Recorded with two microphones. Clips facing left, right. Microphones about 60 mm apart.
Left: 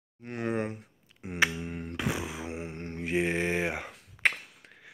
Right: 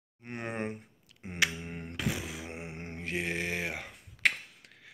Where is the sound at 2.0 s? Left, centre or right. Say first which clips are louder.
Left 2 dB; left.